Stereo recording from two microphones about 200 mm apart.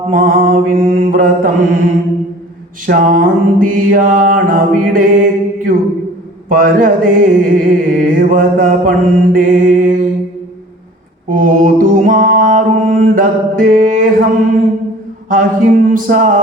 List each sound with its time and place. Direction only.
0.1 s music: 45° right (ahead or behind)
2.8 s music: 45° right (ahead or behind)
11.3 s music: 40° right (ahead or behind)
15.3 s music: 45° right (ahead or behind)